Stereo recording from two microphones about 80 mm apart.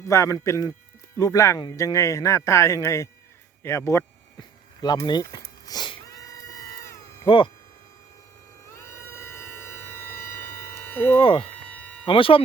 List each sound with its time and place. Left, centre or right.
0.0 s speech: left
4.4 s a sound: left
7.3 s speech: left
8.6 s siren: left
11.2 s speech: left
11.7 s a sound: centre
12.0 s speech: left